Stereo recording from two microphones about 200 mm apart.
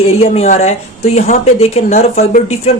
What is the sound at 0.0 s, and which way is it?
Speech, 30° left (ahead or behind).